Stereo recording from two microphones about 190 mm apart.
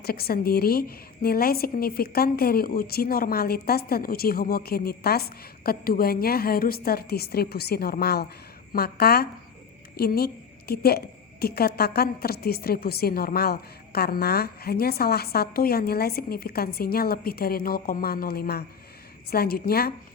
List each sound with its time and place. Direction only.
0.0 s a woman's voice: 55° left (ahead or behind)